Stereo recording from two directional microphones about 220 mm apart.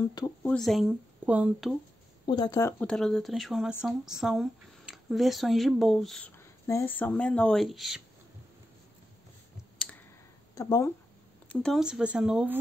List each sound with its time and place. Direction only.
0.1 s speech: 20° left (ahead or behind)
0.5 s speech: centre (ahead or behind)
2.2 s speech: 20° left (ahead or behind)
2.8 s speech: 5° left (ahead or behind)
10.5 s speech: 15° left (ahead or behind)
11.4 s speech: centre (ahead or behind)